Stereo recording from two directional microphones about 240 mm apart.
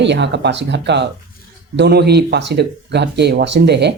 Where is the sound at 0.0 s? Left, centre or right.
Right.